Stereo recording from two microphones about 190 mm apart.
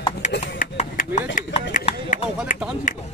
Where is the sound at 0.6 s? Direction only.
40° left (ahead or behind).